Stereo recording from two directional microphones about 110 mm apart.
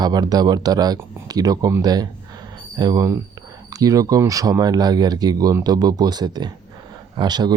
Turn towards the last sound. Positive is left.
turn(degrees=-40)  # may be behind; listen again after turning